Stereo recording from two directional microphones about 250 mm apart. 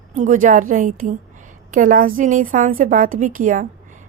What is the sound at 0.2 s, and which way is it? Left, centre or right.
A woman's voice, right.